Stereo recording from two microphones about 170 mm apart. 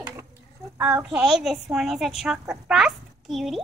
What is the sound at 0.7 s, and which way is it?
A woman's voice, 10° right (ahead or behind).